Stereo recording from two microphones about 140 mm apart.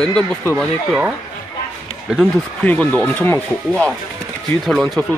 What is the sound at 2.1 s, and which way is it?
Speech, 5° right (ahead or behind).